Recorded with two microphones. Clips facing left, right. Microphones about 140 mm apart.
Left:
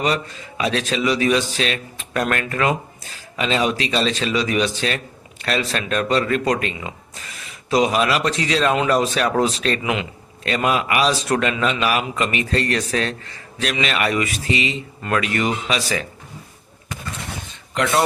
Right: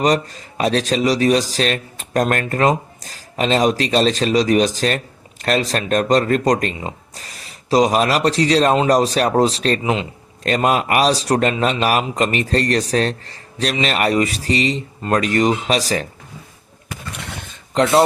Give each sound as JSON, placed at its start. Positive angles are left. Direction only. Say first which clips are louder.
{"t": 0.0, "sound": "a man's voice", "louder": "right 5 dB", "side_deg": -40}
{"t": 10.4, "sound": "a man's voice", "louder": "right 3 dB", "side_deg": -40}
{"t": 17.7, "sound": "a man's voice", "louder": "right 5 dB", "side_deg": -30}